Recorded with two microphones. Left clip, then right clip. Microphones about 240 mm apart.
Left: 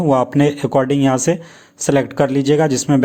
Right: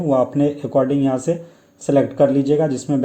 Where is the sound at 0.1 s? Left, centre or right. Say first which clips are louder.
Left 1 dB; left.